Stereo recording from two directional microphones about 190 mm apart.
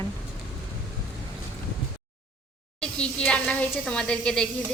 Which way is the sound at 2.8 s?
5° left (ahead or behind).